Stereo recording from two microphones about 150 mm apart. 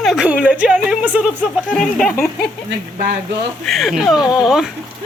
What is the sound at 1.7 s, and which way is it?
Speech, centre (ahead or behind).